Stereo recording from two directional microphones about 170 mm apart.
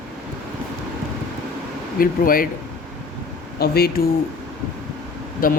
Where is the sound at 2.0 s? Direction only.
55° left (ahead or behind).